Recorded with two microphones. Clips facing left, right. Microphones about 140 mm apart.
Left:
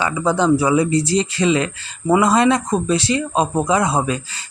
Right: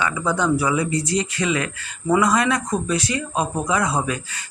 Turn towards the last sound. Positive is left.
turn(degrees=25)  # may be behind; listen again after turning